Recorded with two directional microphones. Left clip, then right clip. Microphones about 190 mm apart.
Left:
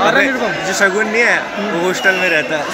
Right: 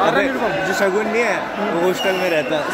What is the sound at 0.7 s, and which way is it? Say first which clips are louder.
Speech: left 7 dB; 5° left (ahead or behind).